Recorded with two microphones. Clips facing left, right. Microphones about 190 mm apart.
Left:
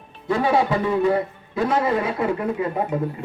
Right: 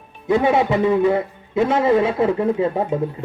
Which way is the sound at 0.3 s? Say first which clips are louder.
Right 3 dB; 20° right (ahead or behind).